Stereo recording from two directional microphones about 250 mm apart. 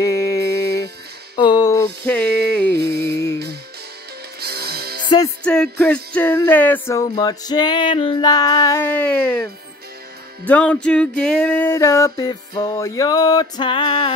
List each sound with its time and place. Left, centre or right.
0.0 s music: centre
4.4 s music: right
5.4 s music: centre